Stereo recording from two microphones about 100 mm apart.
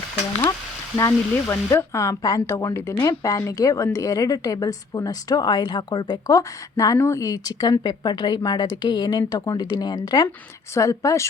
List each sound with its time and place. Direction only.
0.9 s speech: 30° left (ahead or behind); by 6.1 s 50° left (ahead or behind)
6.2 s speech: 35° left (ahead or behind)
10.8 s speech: 30° left (ahead or behind)